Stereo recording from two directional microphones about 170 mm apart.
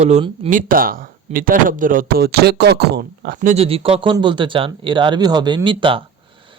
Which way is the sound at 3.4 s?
50° right (ahead or behind).